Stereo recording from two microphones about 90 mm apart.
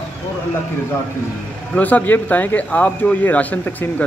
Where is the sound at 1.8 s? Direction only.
20° left (ahead or behind).